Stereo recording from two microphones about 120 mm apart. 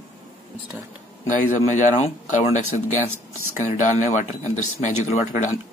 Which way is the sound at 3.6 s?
90° left.